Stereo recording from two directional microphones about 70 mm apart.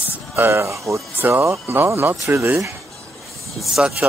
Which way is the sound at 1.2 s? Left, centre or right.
Right.